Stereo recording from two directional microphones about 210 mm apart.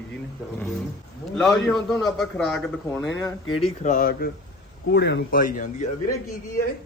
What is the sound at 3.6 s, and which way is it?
Speech, 35° left (ahead or behind).